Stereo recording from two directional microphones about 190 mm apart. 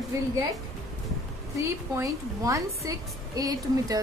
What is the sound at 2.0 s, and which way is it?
A woman's voice, 15° right (ahead or behind).